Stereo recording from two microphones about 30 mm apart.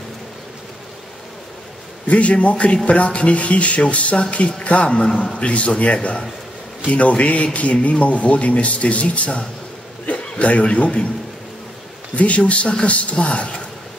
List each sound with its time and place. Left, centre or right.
2.0 s a man's voice: left
12.2 s speech: left